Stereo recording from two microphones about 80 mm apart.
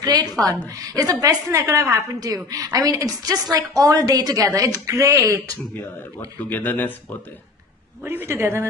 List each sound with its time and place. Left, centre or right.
0.0 s a woman's voice: right
6.5 s speech: left
8.0 s a woman's voice: right